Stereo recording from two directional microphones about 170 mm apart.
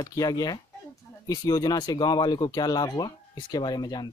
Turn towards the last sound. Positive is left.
turn(degrees=25)  # may be behind; listen again after turning